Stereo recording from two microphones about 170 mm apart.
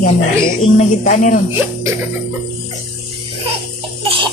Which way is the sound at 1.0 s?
45° left (ahead or behind).